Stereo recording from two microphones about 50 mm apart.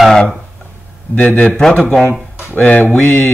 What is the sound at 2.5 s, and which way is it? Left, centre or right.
Speech, left.